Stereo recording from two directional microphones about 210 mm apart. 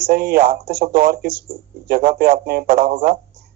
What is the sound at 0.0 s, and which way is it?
Speech, 50° right (ahead or behind).